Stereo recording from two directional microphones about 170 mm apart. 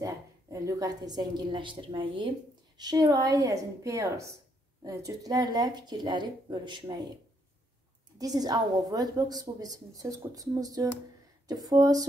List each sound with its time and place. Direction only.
0.0 s a woman's voice: 20° right (ahead or behind)
8.2 s a woman's voice: 20° right (ahead or behind)